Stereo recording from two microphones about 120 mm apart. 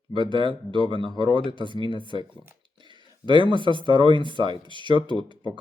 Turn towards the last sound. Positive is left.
turn(degrees=-40)  # may be behind; listen again after turning